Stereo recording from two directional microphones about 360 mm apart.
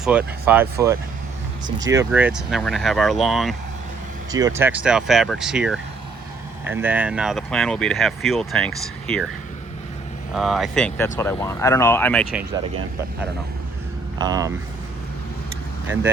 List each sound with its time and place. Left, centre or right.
0.0 s speech: centre
10.3 s speech: centre
14.2 s speech: centre